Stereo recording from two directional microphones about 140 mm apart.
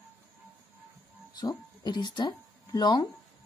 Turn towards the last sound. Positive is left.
turn(degrees=30)  # may be behind; listen again after turning